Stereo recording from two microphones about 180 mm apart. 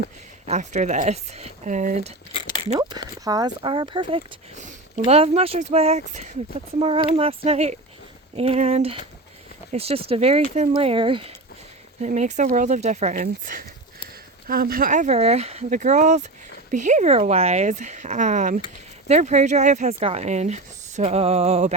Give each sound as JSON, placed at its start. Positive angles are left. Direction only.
{"t": 0.4, "sound": "speech", "side_deg": -40}
{"t": 3.2, "sound": "speech", "side_deg": -20}
{"t": 4.6, "sound": "speech", "side_deg": -40}
{"t": 12.0, "sound": "speech", "side_deg": -40}
{"t": 13.2, "sound": "speech", "side_deg": -50}